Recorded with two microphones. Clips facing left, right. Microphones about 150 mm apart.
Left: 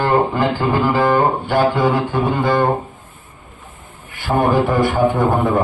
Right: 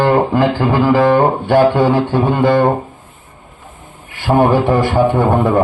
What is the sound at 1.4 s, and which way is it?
A man's voice, 60° right (ahead or behind).